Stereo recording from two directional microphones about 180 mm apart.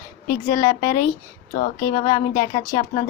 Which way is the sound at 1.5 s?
45° left (ahead or behind).